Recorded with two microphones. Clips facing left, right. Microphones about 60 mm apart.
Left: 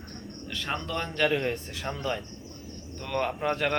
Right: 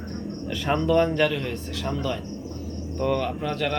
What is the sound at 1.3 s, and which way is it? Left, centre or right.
Speech, left.